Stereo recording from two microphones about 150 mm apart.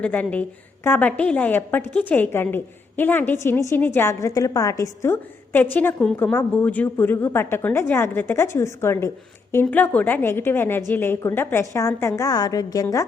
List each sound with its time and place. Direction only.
0.0 s a woman's voice: 10° left (ahead or behind)